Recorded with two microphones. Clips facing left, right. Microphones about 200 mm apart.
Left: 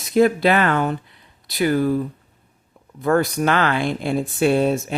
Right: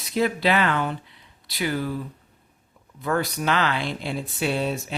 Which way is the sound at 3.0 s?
50° left (ahead or behind).